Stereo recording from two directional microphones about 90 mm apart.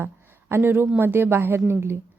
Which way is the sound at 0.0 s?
25° right (ahead or behind).